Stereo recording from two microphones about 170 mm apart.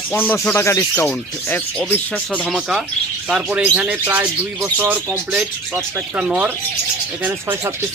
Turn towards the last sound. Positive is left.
turn(degrees=-10)  # may be behind; listen again after turning